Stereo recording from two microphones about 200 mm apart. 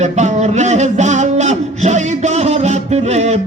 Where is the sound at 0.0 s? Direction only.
35° right (ahead or behind).